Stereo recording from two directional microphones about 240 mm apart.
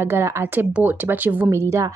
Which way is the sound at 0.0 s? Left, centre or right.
Centre.